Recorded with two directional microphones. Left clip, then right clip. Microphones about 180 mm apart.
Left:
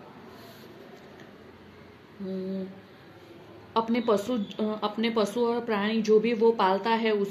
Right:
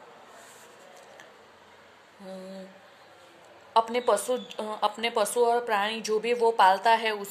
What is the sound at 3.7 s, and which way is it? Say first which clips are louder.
Speech: right 2 dB; 40° right (ahead or behind).